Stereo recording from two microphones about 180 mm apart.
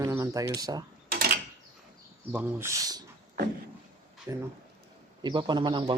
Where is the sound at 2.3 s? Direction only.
15° right (ahead or behind).